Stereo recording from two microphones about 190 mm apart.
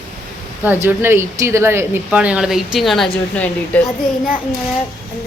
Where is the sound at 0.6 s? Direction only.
10° right (ahead or behind).